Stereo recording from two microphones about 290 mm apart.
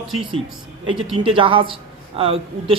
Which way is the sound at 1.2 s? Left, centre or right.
Centre.